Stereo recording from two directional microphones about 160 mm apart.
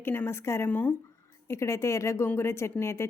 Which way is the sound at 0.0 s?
15° left (ahead or behind).